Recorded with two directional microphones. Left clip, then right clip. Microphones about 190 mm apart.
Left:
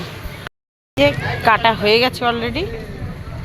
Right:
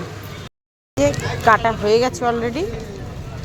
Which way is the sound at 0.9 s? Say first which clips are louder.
Left 3 dB; centre (ahead or behind).